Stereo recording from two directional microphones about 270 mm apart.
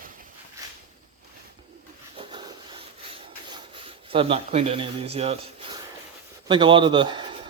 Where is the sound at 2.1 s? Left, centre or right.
Centre.